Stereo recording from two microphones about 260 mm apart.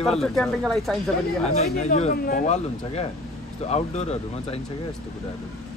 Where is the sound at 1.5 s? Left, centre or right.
Left.